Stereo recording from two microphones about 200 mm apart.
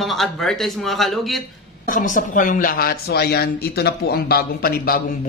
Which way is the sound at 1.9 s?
40° left (ahead or behind).